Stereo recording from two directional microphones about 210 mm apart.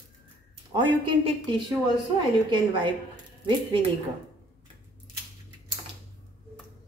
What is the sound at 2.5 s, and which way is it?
Speech, 20° right (ahead or behind).